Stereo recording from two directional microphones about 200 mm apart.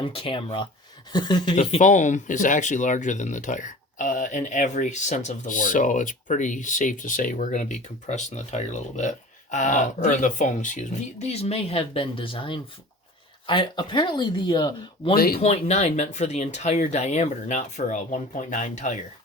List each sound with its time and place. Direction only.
0.0 s speech: 25° left (ahead or behind)
1.5 s speech: 40° left (ahead or behind)
15.1 s speech: 50° left (ahead or behind)
15.4 s speech: 35° left (ahead or behind)